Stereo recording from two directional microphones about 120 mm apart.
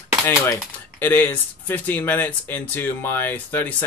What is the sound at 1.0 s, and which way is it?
Speech, 15° left (ahead or behind).